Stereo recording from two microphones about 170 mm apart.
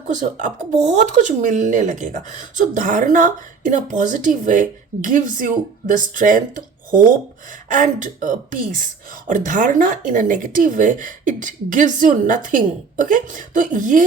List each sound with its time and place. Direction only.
0.1 s speech: 50° right (ahead or behind)